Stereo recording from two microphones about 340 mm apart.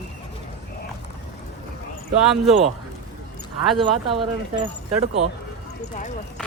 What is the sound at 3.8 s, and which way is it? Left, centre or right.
Speech, centre.